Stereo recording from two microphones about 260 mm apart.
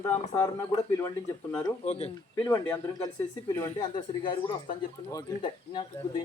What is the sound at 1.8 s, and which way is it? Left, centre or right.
Speech, left.